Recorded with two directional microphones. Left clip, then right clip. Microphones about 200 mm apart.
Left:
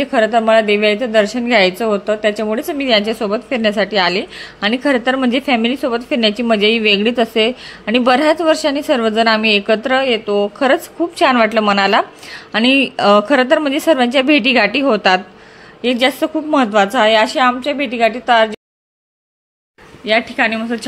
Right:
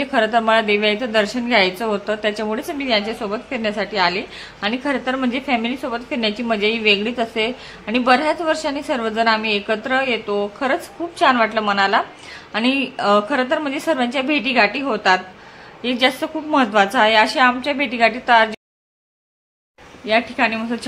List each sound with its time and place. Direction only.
0.0 s a woman's voice: 20° left (ahead or behind)
20.1 s a woman's voice: 15° left (ahead or behind)